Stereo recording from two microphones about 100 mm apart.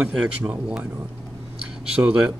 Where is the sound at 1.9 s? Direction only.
10° right (ahead or behind).